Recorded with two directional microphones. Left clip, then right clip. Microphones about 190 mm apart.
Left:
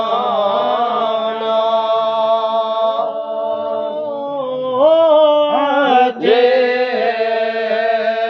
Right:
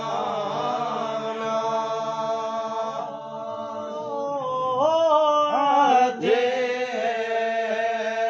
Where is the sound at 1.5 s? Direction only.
25° left (ahead or behind).